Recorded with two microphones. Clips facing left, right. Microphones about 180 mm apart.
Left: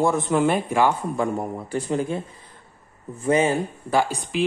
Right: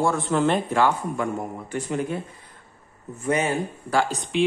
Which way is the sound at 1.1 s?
35° left (ahead or behind).